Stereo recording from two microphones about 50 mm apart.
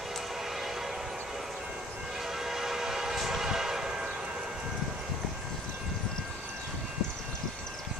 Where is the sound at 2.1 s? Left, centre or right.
Centre.